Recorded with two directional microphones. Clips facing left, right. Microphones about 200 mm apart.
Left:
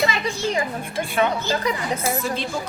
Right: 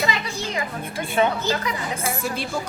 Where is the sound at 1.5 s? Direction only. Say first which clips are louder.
Left 2 dB; 35° left (ahead or behind).